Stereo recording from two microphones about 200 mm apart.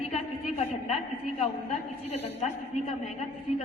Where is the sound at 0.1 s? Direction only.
30° left (ahead or behind).